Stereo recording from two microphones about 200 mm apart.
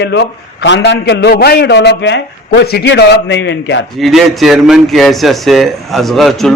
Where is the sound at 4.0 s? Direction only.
Centre (ahead or behind).